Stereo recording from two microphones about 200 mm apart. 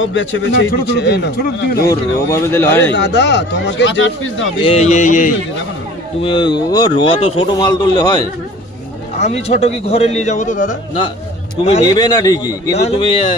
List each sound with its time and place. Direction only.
0.0 s a man's voice: 70° left (ahead or behind); by 1.9 s 50° left (ahead or behind)
2.3 s speech: 10° left (ahead or behind)
3.0 s a man's voice: 60° left (ahead or behind)
4.6 s a man's voice: 30° left (ahead or behind)
6.2 s speech: 25° left (ahead or behind)
9.2 s a man's voice: 30° left (ahead or behind)
11.8 s speech: 20° left (ahead or behind)
12.7 s a man's voice: 30° left (ahead or behind)